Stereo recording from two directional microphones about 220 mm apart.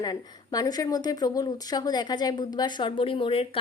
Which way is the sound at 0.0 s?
15° left (ahead or behind).